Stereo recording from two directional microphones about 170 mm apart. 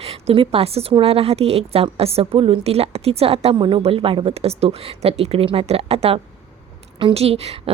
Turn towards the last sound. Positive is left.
turn(degrees=-35)  # may be behind; listen again after turning